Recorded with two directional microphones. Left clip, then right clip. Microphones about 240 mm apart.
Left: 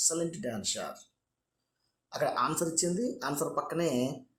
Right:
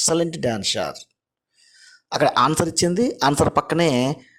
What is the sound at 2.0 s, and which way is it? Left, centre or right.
Speech, right.